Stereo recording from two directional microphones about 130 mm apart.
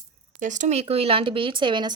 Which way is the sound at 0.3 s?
75° right (ahead or behind).